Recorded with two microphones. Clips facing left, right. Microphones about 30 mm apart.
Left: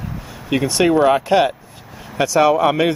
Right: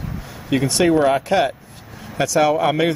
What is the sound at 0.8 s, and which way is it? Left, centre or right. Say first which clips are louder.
Speech: left 2 dB; centre.